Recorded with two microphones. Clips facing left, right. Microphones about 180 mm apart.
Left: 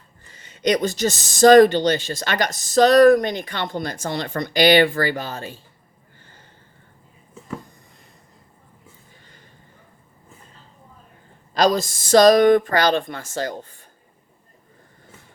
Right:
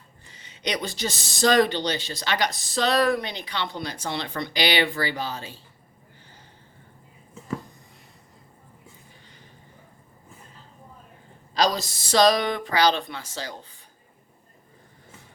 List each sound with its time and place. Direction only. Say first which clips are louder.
0.3 s speech: left 10 dB; 50° left (ahead or behind)
11.5 s speech: left 5 dB; 50° left (ahead or behind)